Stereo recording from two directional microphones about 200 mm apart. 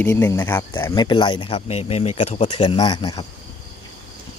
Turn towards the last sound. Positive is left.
turn(degrees=20)  # may be behind; listen again after turning